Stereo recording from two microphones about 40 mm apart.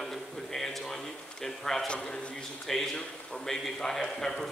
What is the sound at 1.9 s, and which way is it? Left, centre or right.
Speech, left.